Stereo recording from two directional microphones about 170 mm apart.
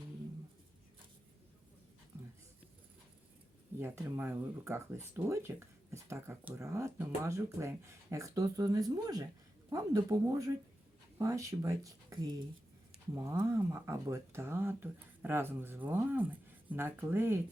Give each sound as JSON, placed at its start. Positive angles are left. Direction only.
{"t": 3.8, "sound": "speech", "side_deg": -15}
{"t": 13.1, "sound": "speech", "side_deg": -15}